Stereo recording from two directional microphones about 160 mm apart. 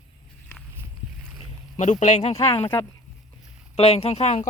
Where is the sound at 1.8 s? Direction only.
45° left (ahead or behind).